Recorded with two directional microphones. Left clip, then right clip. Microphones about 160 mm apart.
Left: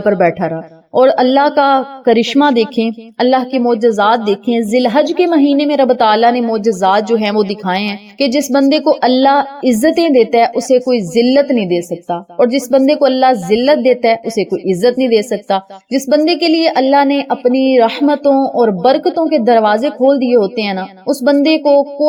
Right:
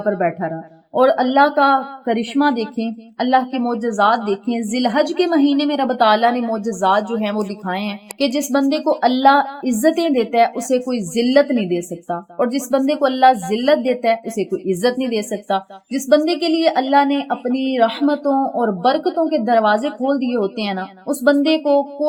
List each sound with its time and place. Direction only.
0.0 s speech: 50° left (ahead or behind)